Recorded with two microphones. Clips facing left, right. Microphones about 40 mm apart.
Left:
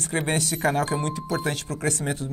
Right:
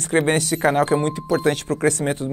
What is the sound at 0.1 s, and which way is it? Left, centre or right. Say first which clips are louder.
Speech: right 7 dB; centre.